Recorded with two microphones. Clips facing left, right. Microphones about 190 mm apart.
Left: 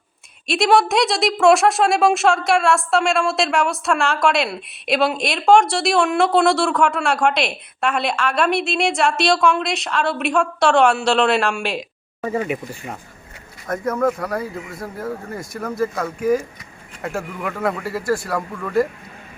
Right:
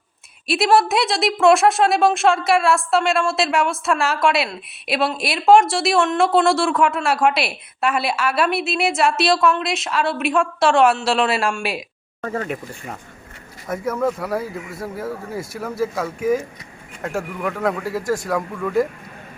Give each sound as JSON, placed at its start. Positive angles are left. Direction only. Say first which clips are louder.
{"t": 0.4, "sound": "a woman's voice", "louder": "even", "side_deg": -5}
{"t": 12.2, "sound": "speech", "louder": "left 3 dB", "side_deg": 10}
{"t": 13.7, "sound": "a woman's voice", "louder": "left 2 dB", "side_deg": -5}
{"t": 17.8, "sound": "speech", "louder": "left 1 dB", "side_deg": -15}
{"t": 18.3, "sound": "a woman's voice", "louder": "right 2 dB", "side_deg": 0}